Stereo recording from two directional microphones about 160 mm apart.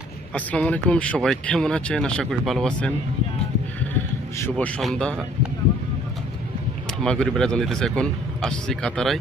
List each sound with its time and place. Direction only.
0.3 s speech: 10° left (ahead or behind)
3.9 s speech: 10° left (ahead or behind)
7.0 s speech: 5° left (ahead or behind)